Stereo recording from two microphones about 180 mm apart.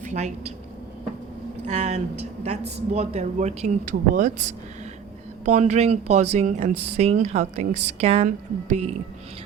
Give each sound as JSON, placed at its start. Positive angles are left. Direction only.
{"t": 0.0, "sound": "speech", "side_deg": -40}
{"t": 1.6, "sound": "speech", "side_deg": -40}
{"t": 5.5, "sound": "speech", "side_deg": -40}
{"t": 7.7, "sound": "a woman's voice", "side_deg": -75}
{"t": 8.0, "sound": "speech", "side_deg": -35}